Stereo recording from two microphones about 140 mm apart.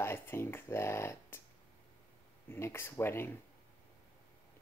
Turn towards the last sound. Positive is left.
turn(degrees=15)  # may be behind; listen again after turning